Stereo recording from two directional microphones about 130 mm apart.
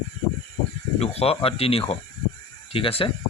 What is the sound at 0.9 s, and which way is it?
Speech, 50° left (ahead or behind).